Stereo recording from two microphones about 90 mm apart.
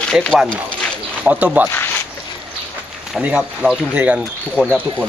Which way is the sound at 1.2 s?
15° right (ahead or behind).